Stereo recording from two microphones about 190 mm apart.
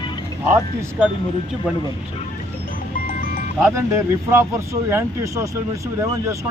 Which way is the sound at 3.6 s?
15° right (ahead or behind).